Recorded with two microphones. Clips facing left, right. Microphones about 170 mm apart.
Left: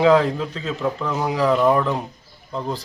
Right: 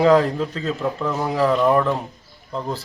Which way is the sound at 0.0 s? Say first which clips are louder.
Even; 10° right (ahead or behind).